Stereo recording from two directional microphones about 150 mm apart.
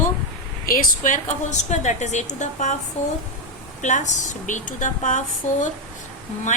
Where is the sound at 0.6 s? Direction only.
70° left (ahead or behind); by 2.7 s 50° left (ahead or behind).